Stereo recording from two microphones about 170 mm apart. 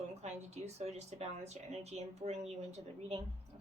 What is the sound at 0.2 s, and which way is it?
Speech, 40° right (ahead or behind).